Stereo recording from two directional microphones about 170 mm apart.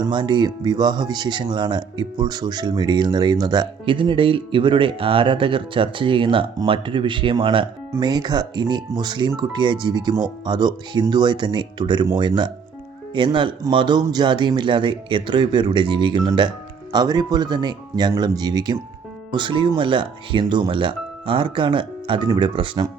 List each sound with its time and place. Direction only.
0.0 s speech: 25° right (ahead or behind)